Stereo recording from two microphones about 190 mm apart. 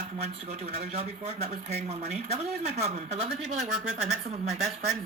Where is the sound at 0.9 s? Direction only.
35° right (ahead or behind).